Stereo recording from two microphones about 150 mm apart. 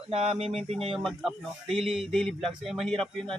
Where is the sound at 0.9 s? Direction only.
Centre (ahead or behind).